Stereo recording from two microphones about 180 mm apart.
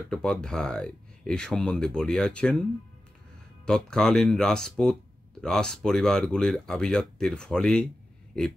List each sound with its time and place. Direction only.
0.1 s speech: 5° left (ahead or behind)
3.6 s speech: 5° left (ahead or behind)